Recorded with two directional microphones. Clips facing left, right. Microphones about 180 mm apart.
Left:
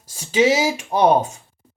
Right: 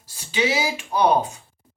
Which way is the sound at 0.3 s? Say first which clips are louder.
Left 6 dB; 45° left (ahead or behind).